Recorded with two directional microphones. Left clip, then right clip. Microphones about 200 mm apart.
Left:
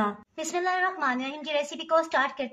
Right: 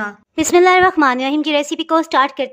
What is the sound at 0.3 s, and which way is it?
A woman's voice, 55° right (ahead or behind).